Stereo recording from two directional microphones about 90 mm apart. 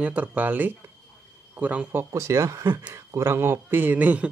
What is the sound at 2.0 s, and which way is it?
A man's voice, 35° right (ahead or behind).